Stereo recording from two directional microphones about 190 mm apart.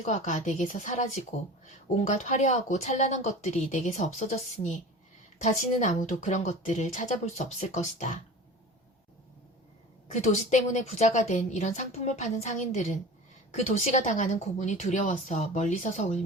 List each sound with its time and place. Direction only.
0.0 s a woman's voice: 40° left (ahead or behind)
10.1 s a woman's voice: 40° left (ahead or behind)